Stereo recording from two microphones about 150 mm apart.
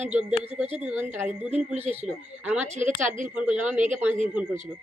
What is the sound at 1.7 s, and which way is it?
Speech, 45° right (ahead or behind).